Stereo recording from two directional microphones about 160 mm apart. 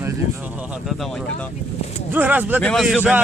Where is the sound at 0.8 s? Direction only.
Centre (ahead or behind).